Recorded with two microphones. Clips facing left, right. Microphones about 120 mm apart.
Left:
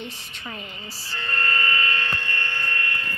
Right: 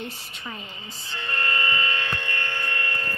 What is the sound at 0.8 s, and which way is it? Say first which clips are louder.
Speech: even; 5° left (ahead or behind).